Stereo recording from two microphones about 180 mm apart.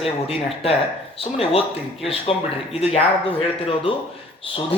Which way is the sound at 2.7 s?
35° left (ahead or behind).